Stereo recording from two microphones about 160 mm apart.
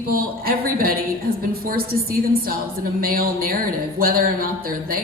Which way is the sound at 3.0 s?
70° right (ahead or behind).